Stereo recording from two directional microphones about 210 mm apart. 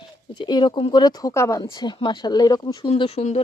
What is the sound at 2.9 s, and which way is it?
Speech, 30° left (ahead or behind).